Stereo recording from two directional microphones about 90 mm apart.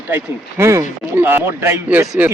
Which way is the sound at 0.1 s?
25° right (ahead or behind).